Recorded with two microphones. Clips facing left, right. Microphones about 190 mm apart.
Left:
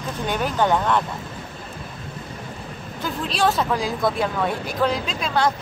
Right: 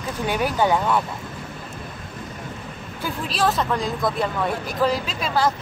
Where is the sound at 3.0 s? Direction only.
5° right (ahead or behind).